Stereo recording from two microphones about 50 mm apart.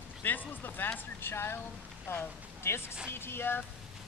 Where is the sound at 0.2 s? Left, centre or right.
Left.